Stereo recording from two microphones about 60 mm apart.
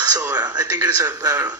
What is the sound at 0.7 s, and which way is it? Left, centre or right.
Speech, right.